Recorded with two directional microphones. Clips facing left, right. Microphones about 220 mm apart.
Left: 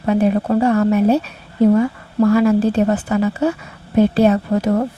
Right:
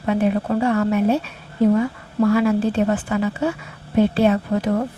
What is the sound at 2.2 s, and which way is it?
Speech, 40° left (ahead or behind).